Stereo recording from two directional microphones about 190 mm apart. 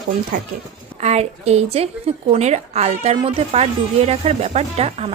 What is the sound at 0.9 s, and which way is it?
A woman's voice, 35° right (ahead or behind).